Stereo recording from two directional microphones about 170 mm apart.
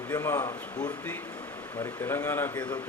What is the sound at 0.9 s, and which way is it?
Speech, 10° left (ahead or behind).